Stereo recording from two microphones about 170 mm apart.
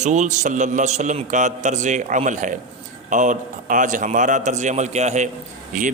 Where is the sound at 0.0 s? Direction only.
45° right (ahead or behind).